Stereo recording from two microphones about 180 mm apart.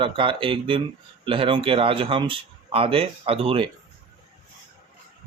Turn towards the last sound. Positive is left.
turn(degrees=-30)  # may be behind; listen again after turning